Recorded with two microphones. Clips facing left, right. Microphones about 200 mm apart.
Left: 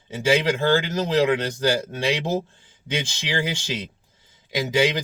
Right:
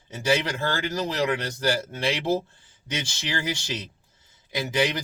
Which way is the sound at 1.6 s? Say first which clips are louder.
Left 3 dB; 15° left (ahead or behind).